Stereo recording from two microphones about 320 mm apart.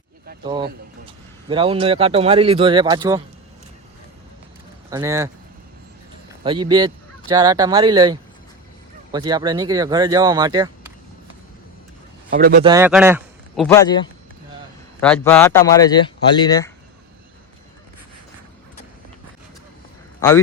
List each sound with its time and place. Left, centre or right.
1.0 s a man's voice: centre
4.9 s a man's voice: centre
6.4 s a man's voice: centre
12.3 s a man's voice: right
12.6 s speech: centre
13.7 s speech: centre
15.0 s speech: centre
20.1 s a man's voice: centre